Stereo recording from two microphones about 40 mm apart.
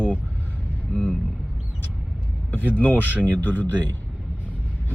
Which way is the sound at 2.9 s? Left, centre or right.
Right.